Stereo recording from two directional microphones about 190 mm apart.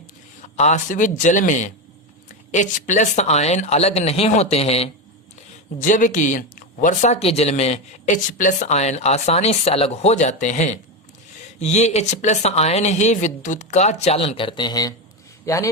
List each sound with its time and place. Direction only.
0.4 s speech: 40° left (ahead or behind)
5.8 s a man's voice: 40° left (ahead or behind); by 15.7 s 15° left (ahead or behind)